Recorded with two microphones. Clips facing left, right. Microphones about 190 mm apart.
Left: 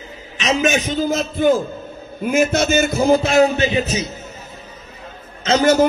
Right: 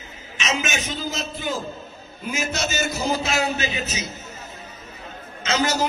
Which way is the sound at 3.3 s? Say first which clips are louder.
Left 10 dB; 30° left (ahead or behind).